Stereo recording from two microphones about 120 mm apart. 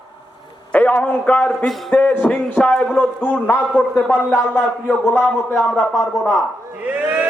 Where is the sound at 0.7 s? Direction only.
15° left (ahead or behind).